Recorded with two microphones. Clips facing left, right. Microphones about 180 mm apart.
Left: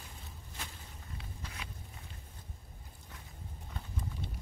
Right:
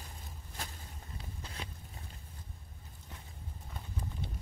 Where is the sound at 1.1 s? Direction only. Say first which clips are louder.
Right 1 dB; 35° right (ahead or behind).